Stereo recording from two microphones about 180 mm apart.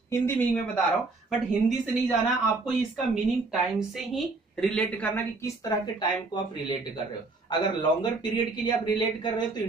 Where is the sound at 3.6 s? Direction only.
Centre (ahead or behind).